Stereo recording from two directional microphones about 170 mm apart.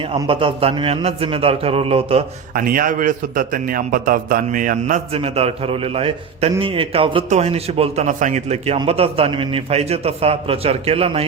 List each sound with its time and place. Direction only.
0.1 s a man's voice: 30° right (ahead or behind)
2.6 s a man's voice: 55° right (ahead or behind)
5.1 s a man's voice: 35° right (ahead or behind)